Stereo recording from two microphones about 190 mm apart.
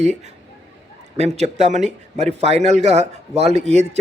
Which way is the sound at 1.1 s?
35° right (ahead or behind).